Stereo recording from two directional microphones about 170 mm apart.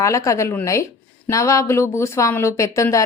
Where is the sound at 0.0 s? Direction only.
15° left (ahead or behind).